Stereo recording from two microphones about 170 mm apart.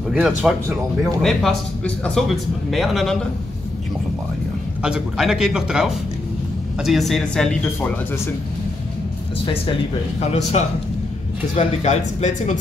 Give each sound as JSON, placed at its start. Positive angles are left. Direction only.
{"t": 0.1, "sound": "speech", "side_deg": -5}
{"t": 4.8, "sound": "speech", "side_deg": -5}
{"t": 10.6, "sound": "a man's voice", "side_deg": 40}